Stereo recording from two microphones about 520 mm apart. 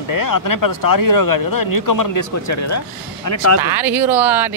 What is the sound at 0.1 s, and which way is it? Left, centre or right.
Speech, left.